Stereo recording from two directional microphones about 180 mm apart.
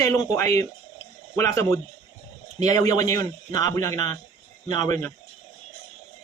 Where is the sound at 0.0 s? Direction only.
15° left (ahead or behind).